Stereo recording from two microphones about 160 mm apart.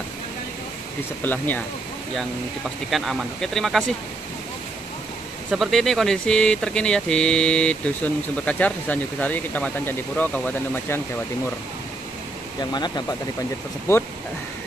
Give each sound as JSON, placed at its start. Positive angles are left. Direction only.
{"t": 1.2, "sound": "speech", "side_deg": 10}
{"t": 2.9, "sound": "speech", "side_deg": 0}
{"t": 5.5, "sound": "speech", "side_deg": 0}
{"t": 12.7, "sound": "speech", "side_deg": 25}